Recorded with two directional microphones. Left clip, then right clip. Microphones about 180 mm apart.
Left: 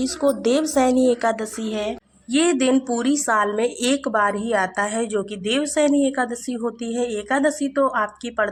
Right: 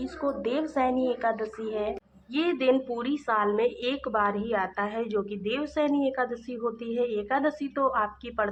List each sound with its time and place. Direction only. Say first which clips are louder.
0.0 s a woman's voice: left 9 dB; 45° left (ahead or behind); by 8.4 s 30° left (ahead or behind)